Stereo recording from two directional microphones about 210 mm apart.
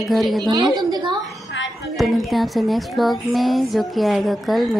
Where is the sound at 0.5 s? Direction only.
20° right (ahead or behind).